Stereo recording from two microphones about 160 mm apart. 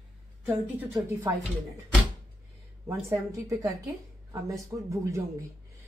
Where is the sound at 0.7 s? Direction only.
15° right (ahead or behind).